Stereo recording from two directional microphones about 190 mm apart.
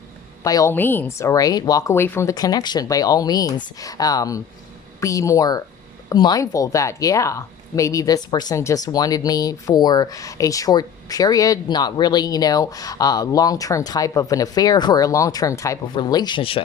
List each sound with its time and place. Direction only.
0.4 s speech: 15° left (ahead or behind)